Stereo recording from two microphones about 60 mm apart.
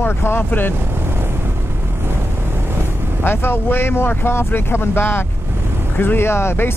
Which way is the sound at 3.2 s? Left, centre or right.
Left.